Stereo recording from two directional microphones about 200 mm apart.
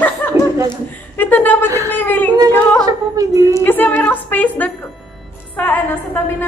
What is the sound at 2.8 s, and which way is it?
Speech, 20° right (ahead or behind).